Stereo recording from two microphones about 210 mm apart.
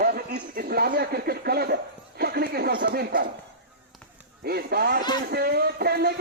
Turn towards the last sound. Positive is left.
turn(degrees=-50)  # may be behind; listen again after turning